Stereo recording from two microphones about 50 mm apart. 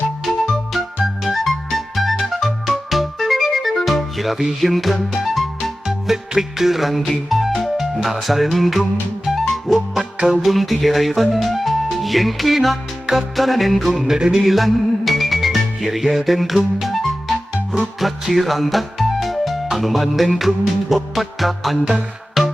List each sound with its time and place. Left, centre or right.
1.2 s music: centre
5.8 s music: centre